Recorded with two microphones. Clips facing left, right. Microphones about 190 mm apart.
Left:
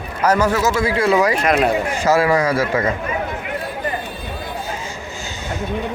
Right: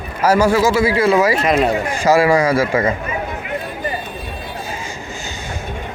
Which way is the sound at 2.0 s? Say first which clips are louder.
Right 3 dB; 10° right (ahead or behind).